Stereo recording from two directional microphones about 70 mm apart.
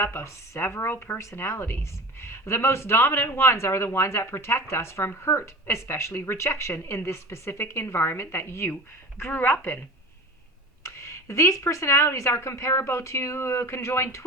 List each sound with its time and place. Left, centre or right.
0.0 s speech: left
1.2 s speech: left
10.8 s speech: left